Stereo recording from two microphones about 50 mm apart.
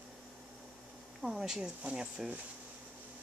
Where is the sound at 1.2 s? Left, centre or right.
Centre.